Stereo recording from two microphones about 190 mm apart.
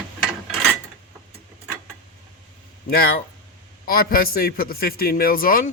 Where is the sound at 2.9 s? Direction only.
50° left (ahead or behind).